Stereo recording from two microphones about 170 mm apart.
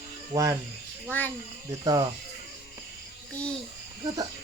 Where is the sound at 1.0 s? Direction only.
10° left (ahead or behind).